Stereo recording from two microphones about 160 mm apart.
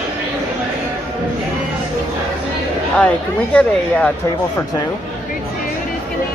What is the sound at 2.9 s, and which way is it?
Speech, 5° left (ahead or behind).